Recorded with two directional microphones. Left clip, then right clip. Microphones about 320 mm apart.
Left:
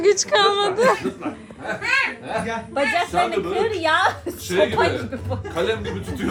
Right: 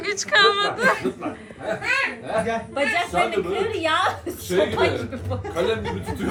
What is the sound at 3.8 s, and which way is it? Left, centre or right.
A woman's voice, left.